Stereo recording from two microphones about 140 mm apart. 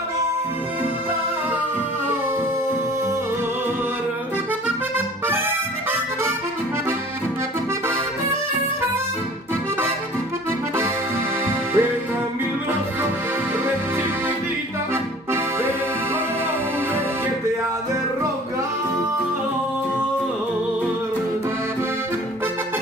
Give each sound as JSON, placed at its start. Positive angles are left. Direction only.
{"t": 11.4, "sound": "music", "side_deg": -15}